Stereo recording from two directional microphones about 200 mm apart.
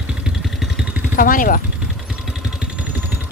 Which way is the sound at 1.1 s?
45° left (ahead or behind).